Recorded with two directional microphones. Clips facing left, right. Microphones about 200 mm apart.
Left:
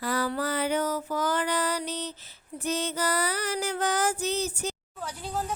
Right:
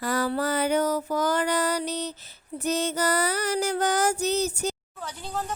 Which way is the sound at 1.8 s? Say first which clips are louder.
Right 4 dB; 40° right (ahead or behind).